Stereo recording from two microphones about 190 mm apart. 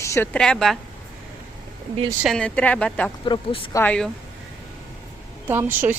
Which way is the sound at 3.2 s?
25° left (ahead or behind).